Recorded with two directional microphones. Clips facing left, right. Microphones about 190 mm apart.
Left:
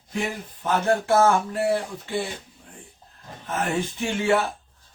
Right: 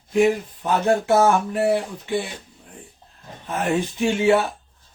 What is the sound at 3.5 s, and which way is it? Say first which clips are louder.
Speech: right 3 dB; 15° right (ahead or behind).